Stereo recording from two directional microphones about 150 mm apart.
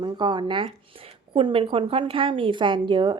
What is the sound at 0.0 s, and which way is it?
Speech, 30° right (ahead or behind).